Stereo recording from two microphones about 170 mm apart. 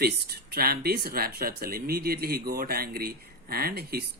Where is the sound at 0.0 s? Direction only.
65° right (ahead or behind).